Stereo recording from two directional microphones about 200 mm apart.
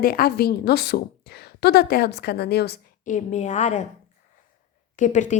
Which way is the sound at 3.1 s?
35° left (ahead or behind).